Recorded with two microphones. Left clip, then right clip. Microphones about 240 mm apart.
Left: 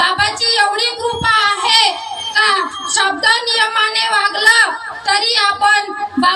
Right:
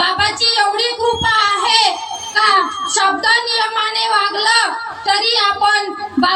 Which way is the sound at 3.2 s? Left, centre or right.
Left.